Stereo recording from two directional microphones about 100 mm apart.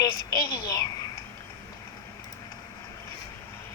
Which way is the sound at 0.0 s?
35° left (ahead or behind).